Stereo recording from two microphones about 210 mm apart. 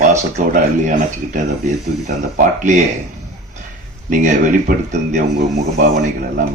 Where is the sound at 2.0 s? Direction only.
35° right (ahead or behind).